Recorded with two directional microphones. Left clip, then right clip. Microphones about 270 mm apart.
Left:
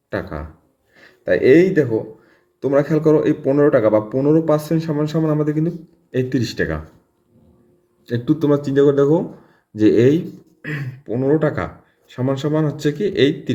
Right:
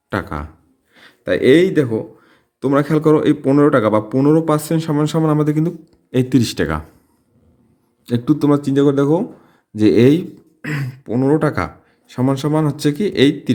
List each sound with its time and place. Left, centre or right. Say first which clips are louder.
0.1 s a man's voice: right 3 dB; right
8.0 s a man's voice: right 2 dB; right